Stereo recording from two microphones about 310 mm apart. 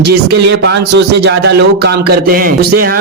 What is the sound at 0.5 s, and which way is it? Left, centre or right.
A man's voice, right.